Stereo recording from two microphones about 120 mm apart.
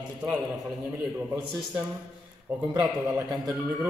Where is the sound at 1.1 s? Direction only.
20° right (ahead or behind).